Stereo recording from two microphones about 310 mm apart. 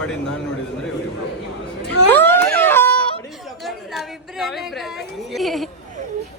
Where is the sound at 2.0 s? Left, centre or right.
Centre.